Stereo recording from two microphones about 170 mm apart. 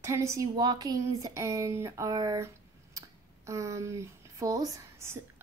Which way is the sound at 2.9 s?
20° right (ahead or behind).